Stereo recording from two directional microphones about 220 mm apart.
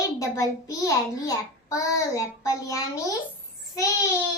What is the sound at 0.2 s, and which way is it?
A child's voice, 15° left (ahead or behind).